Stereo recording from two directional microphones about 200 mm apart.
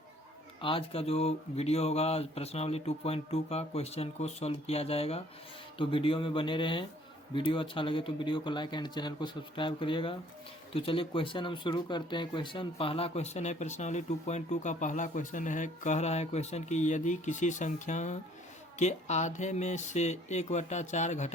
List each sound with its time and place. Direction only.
0.6 s speech: 25° left (ahead or behind)